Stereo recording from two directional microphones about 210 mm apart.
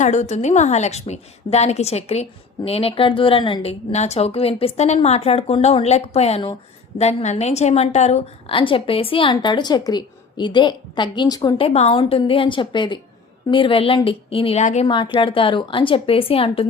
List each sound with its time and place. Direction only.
0.0 s a woman's voice: 35° left (ahead or behind)